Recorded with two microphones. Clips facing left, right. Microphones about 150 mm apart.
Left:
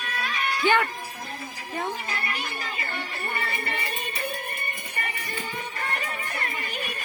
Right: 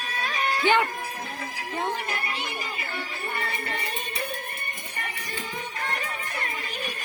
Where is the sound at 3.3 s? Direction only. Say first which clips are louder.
Even; centre (ahead or behind).